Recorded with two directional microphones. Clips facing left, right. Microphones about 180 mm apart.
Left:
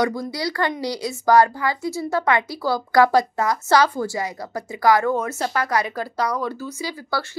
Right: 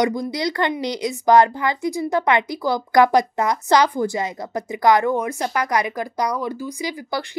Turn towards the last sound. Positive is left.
turn(degrees=-15)  # may be behind; listen again after turning